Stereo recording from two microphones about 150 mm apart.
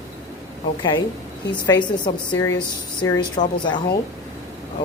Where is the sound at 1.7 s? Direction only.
30° left (ahead or behind).